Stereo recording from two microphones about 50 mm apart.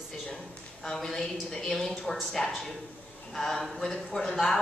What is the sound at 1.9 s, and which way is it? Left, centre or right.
A woman's voice, centre.